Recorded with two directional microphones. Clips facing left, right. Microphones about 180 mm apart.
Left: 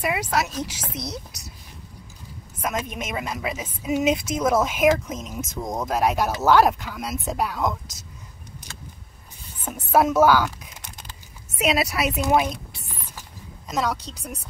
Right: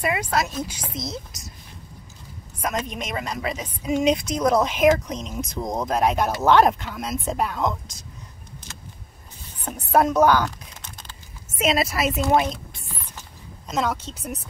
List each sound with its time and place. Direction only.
0.0 s a woman's voice: centre (ahead or behind)
0.9 s speech: 70° left (ahead or behind)
2.6 s a woman's voice: 5° left (ahead or behind)
9.7 s speech: 5° left (ahead or behind)
11.5 s a woman's voice: centre (ahead or behind)
13.7 s a woman's voice: centre (ahead or behind)